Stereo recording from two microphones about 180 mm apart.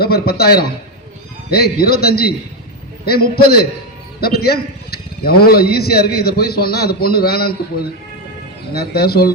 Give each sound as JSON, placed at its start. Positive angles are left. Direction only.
{"t": 0.0, "sound": "a man's voice", "side_deg": 60}
{"t": 8.7, "sound": "a man's voice", "side_deg": 60}